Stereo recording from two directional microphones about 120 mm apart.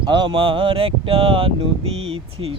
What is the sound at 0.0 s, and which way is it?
Speech, 40° right (ahead or behind).